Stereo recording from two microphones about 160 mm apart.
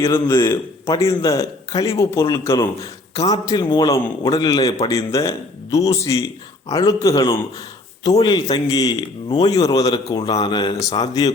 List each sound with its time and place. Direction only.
0.1 s speech: 20° left (ahead or behind)